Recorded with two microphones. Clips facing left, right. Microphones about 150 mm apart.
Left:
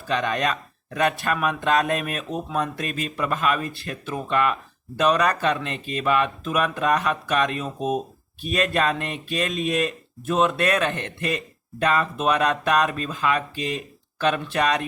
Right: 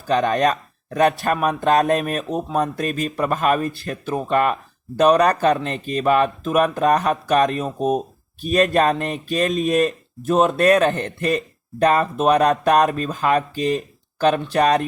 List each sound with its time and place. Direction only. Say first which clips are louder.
0.1 s speech: right 6 dB; 45° right (ahead or behind)
1.2 s a sound: right 4 dB; 40° right (ahead or behind)
1.6 s speech: right 6 dB; 45° right (ahead or behind)